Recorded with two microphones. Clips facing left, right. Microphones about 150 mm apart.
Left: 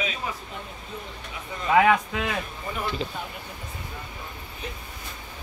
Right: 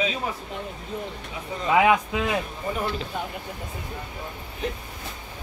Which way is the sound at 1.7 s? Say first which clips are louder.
Even; 15° right (ahead or behind).